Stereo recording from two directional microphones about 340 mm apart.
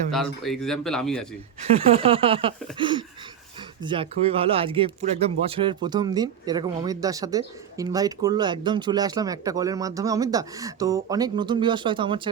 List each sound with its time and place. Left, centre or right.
0.1 s speech: centre
1.7 s speech: centre